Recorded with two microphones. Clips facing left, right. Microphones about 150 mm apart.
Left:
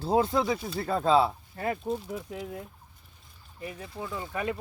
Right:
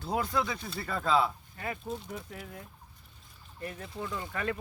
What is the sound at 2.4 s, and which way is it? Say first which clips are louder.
Speech: left 7 dB; 25° left (ahead or behind).